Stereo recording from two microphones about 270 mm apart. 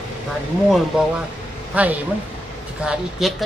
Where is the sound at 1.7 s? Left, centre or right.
Centre.